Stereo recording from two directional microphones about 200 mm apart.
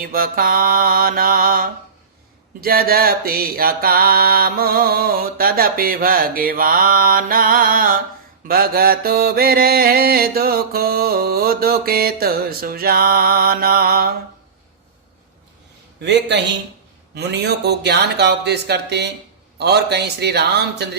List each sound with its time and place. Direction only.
0.0 s mantra: 45° right (ahead or behind)
16.0 s speech: 60° right (ahead or behind)